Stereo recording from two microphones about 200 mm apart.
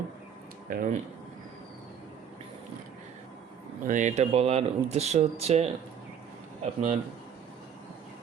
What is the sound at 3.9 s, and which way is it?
Speech, 35° right (ahead or behind).